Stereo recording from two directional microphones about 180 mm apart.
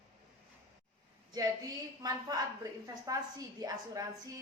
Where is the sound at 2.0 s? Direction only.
20° right (ahead or behind).